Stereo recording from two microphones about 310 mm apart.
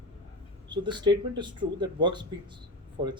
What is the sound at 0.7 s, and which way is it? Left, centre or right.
A man's voice, centre.